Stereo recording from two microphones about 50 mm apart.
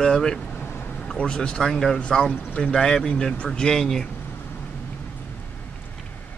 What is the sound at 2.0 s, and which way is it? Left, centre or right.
A man's voice, centre.